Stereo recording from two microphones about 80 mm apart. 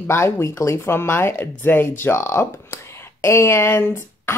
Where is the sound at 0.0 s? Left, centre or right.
Left.